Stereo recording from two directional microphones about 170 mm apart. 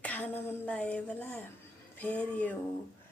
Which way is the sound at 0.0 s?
10° left (ahead or behind).